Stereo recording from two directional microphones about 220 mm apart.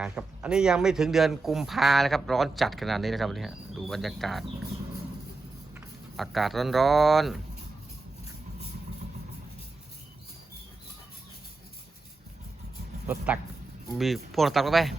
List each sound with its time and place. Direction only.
0.0 s speech: 5° right (ahead or behind)
5.7 s speech: centre (ahead or behind)
13.1 s speech: 5° right (ahead or behind)